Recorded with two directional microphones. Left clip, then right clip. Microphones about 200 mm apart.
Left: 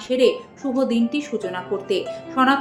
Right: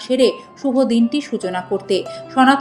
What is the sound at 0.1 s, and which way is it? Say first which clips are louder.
A woman's voice: right 2 dB; 45° right (ahead or behind).